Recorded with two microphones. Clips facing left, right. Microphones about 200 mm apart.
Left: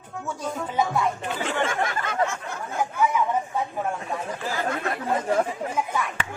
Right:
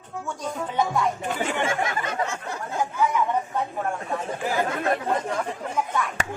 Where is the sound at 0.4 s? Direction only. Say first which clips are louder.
Even; 5° left (ahead or behind).